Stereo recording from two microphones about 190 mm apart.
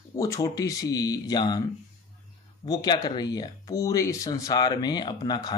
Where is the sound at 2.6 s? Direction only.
20° left (ahead or behind).